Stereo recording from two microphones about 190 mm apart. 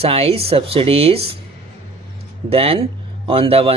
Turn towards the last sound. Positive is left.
turn(degrees=-30)  # may be behind; listen again after turning